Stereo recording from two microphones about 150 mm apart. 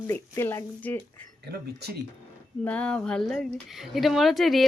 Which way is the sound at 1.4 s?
90° right.